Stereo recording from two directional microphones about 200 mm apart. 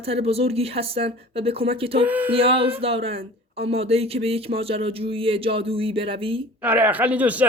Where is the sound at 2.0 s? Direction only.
10° right (ahead or behind).